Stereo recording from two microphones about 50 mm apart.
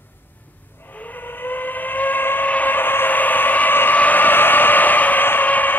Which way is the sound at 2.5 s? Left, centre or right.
Left.